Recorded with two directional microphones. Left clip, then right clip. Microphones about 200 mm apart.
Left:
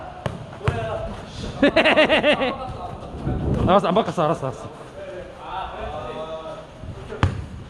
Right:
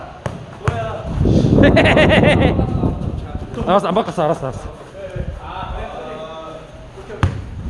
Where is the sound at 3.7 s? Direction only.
5° left (ahead or behind).